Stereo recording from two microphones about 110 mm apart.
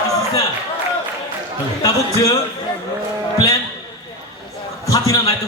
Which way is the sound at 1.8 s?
30° left (ahead or behind).